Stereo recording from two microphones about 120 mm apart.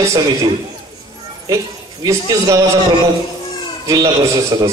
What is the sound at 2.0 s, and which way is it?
Speech, 25° right (ahead or behind).